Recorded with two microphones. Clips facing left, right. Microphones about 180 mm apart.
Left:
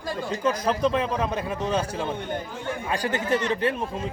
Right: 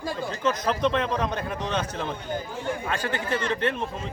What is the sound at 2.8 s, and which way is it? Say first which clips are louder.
A man's voice: left 2 dB; 15° left (ahead or behind).